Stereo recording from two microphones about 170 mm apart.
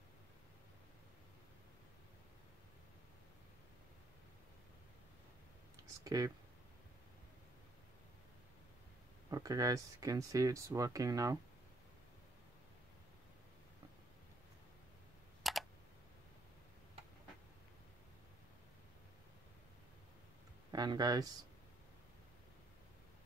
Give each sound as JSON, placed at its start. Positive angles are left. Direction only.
{"t": 6.0, "sound": "speech", "side_deg": -20}
{"t": 9.3, "sound": "speech", "side_deg": -20}
{"t": 15.4, "sound": "computer keyboard", "side_deg": 0}
{"t": 20.7, "sound": "speech", "side_deg": -25}